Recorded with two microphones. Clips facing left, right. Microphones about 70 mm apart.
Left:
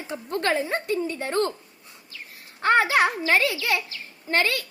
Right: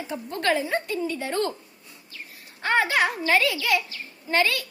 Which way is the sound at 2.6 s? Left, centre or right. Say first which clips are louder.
Left 3 dB; left.